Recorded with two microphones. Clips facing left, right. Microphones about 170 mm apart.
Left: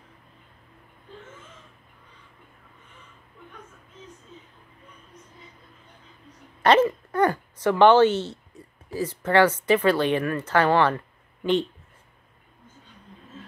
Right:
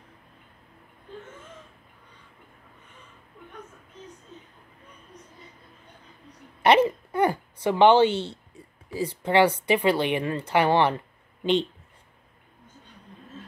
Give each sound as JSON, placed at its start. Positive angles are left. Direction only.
{"t": 6.6, "sound": "speech", "side_deg": -15}